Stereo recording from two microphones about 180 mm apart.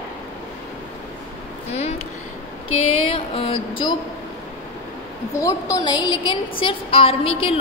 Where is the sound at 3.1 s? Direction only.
30° left (ahead or behind).